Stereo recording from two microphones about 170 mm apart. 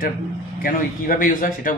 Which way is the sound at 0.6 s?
55° left (ahead or behind).